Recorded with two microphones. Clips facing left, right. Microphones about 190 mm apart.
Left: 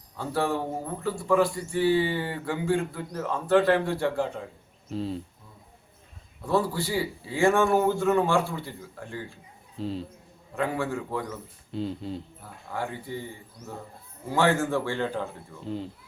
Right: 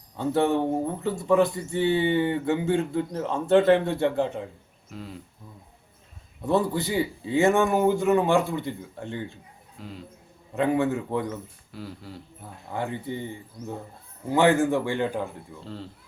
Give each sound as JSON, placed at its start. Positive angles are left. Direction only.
{"t": 0.2, "sound": "speech", "side_deg": -20}
{"t": 4.9, "sound": "speech", "side_deg": 30}
{"t": 6.4, "sound": "speech", "side_deg": -20}
{"t": 9.7, "sound": "speech", "side_deg": 30}
{"t": 10.5, "sound": "speech", "side_deg": -20}
{"t": 11.7, "sound": "speech", "side_deg": 25}
{"t": 12.4, "sound": "speech", "side_deg": -20}
{"t": 14.3, "sound": "a man's voice", "side_deg": -15}
{"t": 15.6, "sound": "speech", "side_deg": 15}